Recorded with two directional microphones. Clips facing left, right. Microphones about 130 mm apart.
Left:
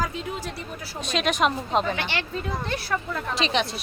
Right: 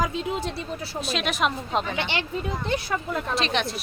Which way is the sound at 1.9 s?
20° right (ahead or behind).